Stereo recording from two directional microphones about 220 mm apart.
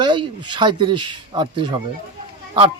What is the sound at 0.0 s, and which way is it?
Speech, 20° right (ahead or behind).